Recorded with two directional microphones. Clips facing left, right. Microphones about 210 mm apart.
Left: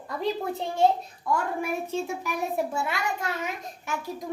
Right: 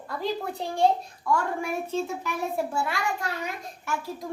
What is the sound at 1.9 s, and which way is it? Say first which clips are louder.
A woman's voice: right 1 dB; 10° left (ahead or behind).